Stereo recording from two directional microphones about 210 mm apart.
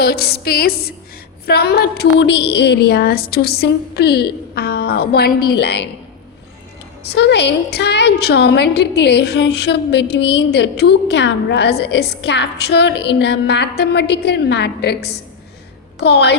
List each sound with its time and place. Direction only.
0.0 s a woman's voice: 50° left (ahead or behind)
7.1 s a woman's voice: 55° left (ahead or behind)